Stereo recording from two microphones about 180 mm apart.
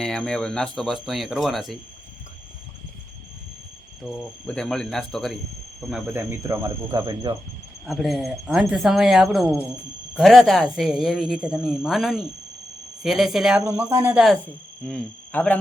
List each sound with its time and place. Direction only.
0.0 s speech: 5° left (ahead or behind)
4.0 s speech: 5° left (ahead or behind)
6.1 s speech: 15° right (ahead or behind)
7.9 s speech: centre (ahead or behind)
13.7 s speech: 15° right (ahead or behind)
14.8 s speech: 5° left (ahead or behind)